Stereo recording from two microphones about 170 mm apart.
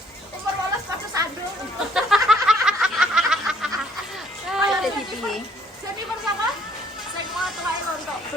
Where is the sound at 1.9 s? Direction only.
Centre (ahead or behind).